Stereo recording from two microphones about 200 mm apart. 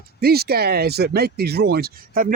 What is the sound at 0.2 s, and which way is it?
Speech, 50° right (ahead or behind).